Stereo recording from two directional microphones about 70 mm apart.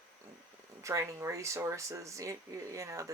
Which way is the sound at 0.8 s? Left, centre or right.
Right.